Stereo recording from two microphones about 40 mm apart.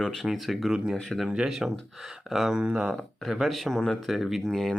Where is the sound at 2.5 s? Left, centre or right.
Right.